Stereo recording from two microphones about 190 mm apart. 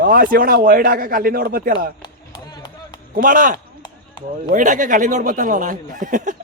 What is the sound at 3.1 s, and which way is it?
A man's voice, 45° right (ahead or behind).